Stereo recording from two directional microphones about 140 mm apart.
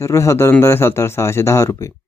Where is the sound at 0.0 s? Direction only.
20° left (ahead or behind).